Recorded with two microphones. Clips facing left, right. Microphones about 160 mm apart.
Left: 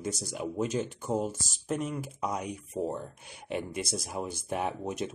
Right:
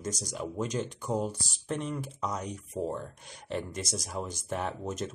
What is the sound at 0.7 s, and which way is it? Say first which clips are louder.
Speech: left 1 dB; 50° left (ahead or behind).